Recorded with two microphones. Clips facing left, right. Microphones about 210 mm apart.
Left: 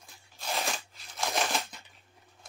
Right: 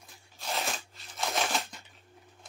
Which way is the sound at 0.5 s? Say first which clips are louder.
Left 1 dB; centre (ahead or behind).